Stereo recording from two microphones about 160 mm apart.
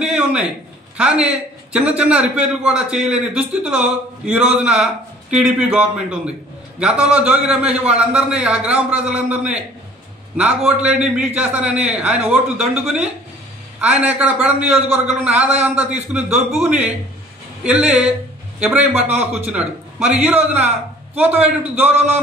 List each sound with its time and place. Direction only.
0.0 s a sound: 5° right (ahead or behind)
0.9 s a man's voice: 5° right (ahead or behind)
17.7 s speech: 40° right (ahead or behind)
18.6 s a man's voice: 10° right (ahead or behind)